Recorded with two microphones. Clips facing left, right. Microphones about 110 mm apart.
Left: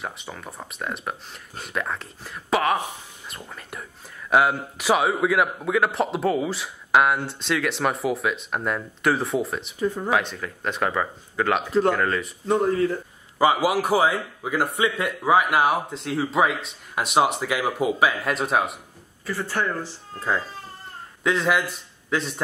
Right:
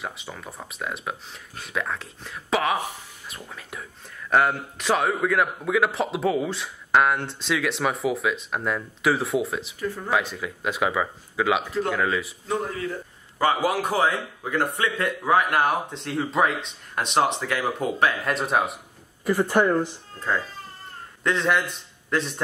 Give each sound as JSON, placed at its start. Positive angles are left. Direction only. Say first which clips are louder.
{"t": 0.0, "sound": "a man's voice", "louder": "left 1 dB", "side_deg": 0}
{"t": 9.8, "sound": "speech", "louder": "left 8 dB", "side_deg": 20}
{"t": 10.0, "sound": "a man's voice", "louder": "left 1 dB", "side_deg": 0}
{"t": 13.4, "sound": "a man's voice", "louder": "left 2 dB", "side_deg": 10}
{"t": 19.2, "sound": "speech", "louder": "right 6 dB", "side_deg": -20}
{"t": 20.2, "sound": "a man's voice", "louder": "left 1 dB", "side_deg": 5}